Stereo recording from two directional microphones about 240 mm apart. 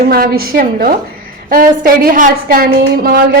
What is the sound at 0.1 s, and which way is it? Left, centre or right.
A woman's voice, right.